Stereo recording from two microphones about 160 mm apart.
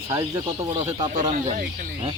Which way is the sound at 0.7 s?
40° right (ahead or behind).